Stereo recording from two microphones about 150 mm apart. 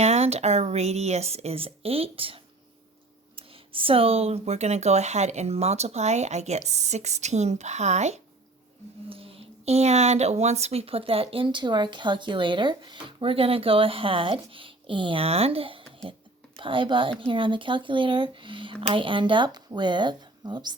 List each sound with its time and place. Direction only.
0.0 s speech: 45° right (ahead or behind)
9.0 s speech: 40° right (ahead or behind)